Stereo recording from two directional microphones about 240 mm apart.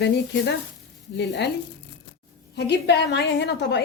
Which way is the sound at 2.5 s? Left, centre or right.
Left.